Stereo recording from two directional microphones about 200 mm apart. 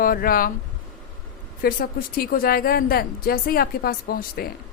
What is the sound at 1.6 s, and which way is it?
A woman's voice, 45° left (ahead or behind).